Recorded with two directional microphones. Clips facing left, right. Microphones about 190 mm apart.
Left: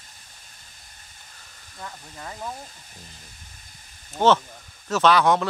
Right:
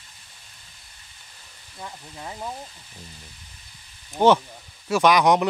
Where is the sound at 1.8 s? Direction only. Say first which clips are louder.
Right 1 dB; 15° right (ahead or behind).